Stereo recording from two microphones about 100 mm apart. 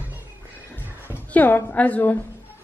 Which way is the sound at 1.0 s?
15° left (ahead or behind).